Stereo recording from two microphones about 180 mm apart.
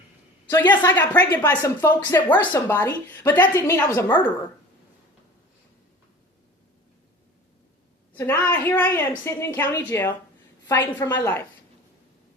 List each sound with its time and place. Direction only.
0.5 s a woman's voice: 25° left (ahead or behind)
0.8 s speech: 10° left (ahead or behind)
8.1 s speech: 10° left (ahead or behind)